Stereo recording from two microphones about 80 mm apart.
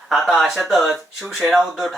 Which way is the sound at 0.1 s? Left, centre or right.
Centre.